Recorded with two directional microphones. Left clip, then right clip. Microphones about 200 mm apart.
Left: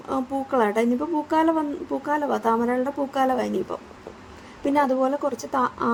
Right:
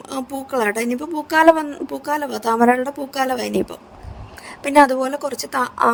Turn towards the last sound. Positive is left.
turn(degrees=-55)  # may be behind; listen again after turning